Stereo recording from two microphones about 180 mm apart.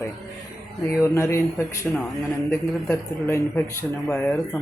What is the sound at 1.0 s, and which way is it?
Speech, 15° left (ahead or behind).